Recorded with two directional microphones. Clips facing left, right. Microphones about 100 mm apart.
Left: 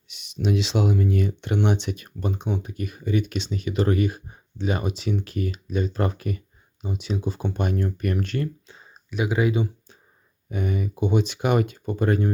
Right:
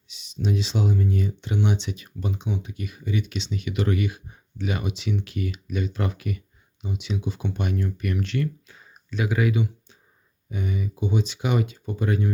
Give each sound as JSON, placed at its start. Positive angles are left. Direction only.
{"t": 0.1, "sound": "speech", "side_deg": 60}
{"t": 8.6, "sound": "a sound", "side_deg": 25}
{"t": 9.0, "sound": "speech", "side_deg": 20}
{"t": 10.5, "sound": "speech", "side_deg": 55}